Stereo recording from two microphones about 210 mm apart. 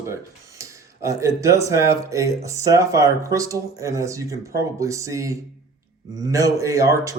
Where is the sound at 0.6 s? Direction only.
15° right (ahead or behind).